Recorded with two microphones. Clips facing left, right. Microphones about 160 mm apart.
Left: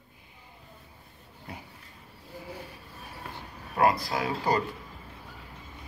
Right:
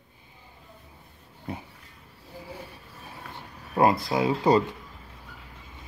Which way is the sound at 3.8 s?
25° right (ahead or behind).